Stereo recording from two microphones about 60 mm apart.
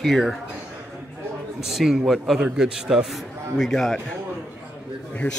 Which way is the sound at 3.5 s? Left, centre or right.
Centre.